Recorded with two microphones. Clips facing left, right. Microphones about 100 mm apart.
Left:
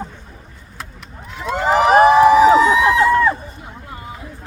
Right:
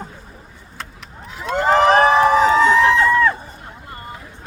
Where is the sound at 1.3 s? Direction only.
Centre (ahead or behind).